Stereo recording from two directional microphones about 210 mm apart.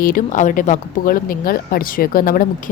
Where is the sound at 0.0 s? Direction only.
40° left (ahead or behind).